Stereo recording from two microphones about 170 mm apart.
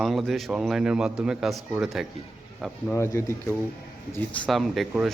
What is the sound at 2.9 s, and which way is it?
Speech, 15° left (ahead or behind).